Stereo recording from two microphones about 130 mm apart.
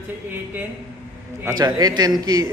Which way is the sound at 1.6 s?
30° right (ahead or behind).